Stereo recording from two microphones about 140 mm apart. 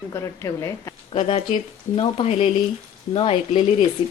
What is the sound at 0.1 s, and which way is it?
Speech, 20° left (ahead or behind).